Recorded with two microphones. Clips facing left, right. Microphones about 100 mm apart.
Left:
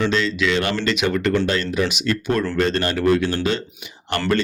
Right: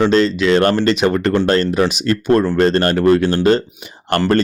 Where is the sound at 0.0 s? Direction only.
40° right (ahead or behind).